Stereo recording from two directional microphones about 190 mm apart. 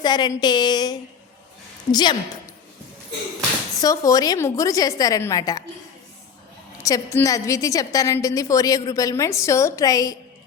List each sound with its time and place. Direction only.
0.0 s a woman's voice: 20° left (ahead or behind)
3.8 s a woman's voice: 20° left (ahead or behind)
6.8 s a woman's voice: 15° left (ahead or behind)